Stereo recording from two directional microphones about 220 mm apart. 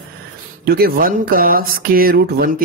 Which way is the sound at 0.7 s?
45° right (ahead or behind).